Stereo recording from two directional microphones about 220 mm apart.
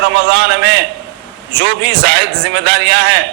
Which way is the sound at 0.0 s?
50° right (ahead or behind).